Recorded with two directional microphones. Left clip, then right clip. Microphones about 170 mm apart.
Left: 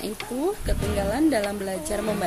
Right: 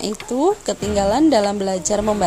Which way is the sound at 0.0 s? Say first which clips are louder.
Right 9 dB; 35° right (ahead or behind).